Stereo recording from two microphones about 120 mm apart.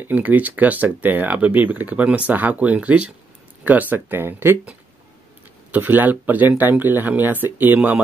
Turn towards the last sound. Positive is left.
turn(degrees=-15)  # may be behind; listen again after turning